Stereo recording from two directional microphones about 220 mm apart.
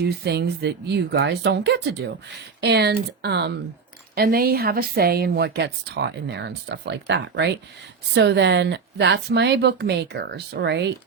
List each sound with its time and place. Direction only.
0.0 s speech: 50° right (ahead or behind)